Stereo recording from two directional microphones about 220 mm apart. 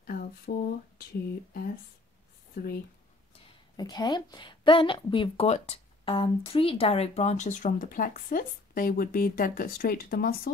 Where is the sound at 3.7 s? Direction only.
20° left (ahead or behind).